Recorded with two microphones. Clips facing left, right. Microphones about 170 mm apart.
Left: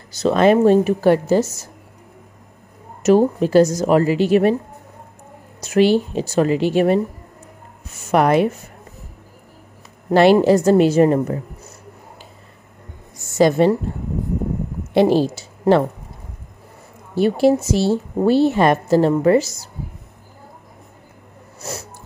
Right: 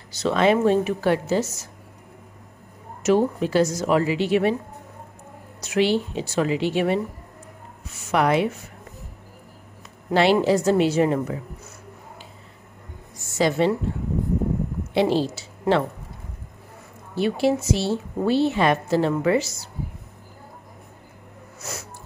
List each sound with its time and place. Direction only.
0.2 s a woman's voice: 45° left (ahead or behind)
3.0 s a woman's voice: 40° left (ahead or behind)
5.6 s a woman's voice: 45° left (ahead or behind)
8.1 s a woman's voice: 45° left (ahead or behind)
10.0 s a woman's voice: 45° left (ahead or behind)
13.4 s a woman's voice: 45° left (ahead or behind)
15.0 s a woman's voice: 50° left (ahead or behind)
17.1 s a woman's voice: 40° left (ahead or behind)
21.5 s music: 35° left (ahead or behind)